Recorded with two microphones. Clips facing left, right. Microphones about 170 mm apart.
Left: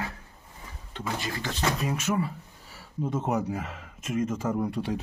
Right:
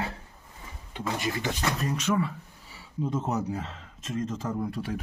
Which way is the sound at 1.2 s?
20° right (ahead or behind).